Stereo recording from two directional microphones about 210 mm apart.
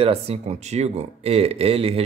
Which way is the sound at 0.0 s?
30° right (ahead or behind).